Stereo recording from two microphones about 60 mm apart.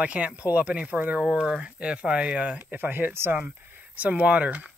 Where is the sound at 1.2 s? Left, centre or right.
Centre; by 3.4 s right.